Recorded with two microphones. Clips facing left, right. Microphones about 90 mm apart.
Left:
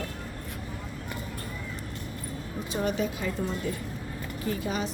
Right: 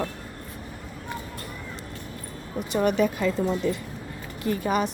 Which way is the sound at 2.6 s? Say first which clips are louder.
Right 7 dB; 65° right (ahead or behind).